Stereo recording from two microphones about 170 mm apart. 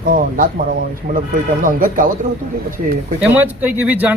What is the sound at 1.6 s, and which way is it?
Speech, 55° right (ahead or behind).